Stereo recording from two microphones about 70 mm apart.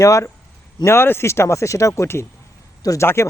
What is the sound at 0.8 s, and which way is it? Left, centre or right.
Speech, left.